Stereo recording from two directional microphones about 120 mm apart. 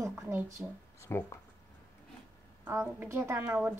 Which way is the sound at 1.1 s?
20° left (ahead or behind).